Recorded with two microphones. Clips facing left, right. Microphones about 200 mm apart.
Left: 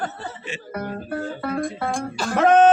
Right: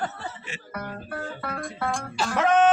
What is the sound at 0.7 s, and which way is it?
Music, 30° left (ahead or behind).